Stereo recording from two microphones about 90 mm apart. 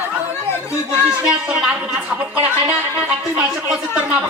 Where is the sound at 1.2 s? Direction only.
10° right (ahead or behind).